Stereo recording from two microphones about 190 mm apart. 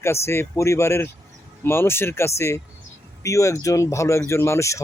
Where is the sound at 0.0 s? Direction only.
15° left (ahead or behind).